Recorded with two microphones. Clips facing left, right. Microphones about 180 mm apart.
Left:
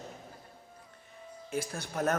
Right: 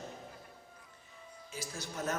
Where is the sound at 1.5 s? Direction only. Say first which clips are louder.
Left 7 dB; 55° left (ahead or behind).